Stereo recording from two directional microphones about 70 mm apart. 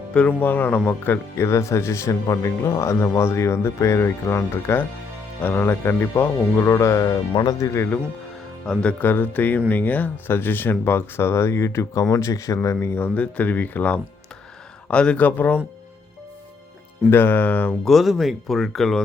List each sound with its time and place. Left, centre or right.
0.1 s speech: centre
0.3 s speech: left
6.7 s speech: left
8.6 s speech: centre
9.0 s speech: left
13.0 s speech: centre
14.8 s speech: centre
17.1 s speech: left
17.8 s speech: centre